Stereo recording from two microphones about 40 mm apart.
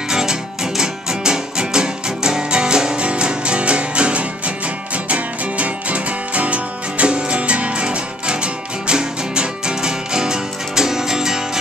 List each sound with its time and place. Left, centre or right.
0.1 s music: centre